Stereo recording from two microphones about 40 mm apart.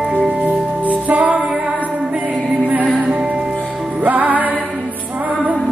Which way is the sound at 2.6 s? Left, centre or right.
Right.